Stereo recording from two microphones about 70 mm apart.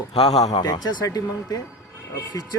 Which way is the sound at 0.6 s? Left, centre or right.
Left.